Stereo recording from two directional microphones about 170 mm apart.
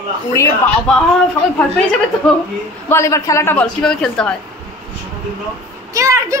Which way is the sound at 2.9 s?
15° left (ahead or behind).